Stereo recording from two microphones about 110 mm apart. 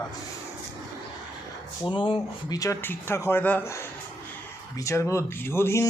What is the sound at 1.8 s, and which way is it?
Speech, 50° left (ahead or behind).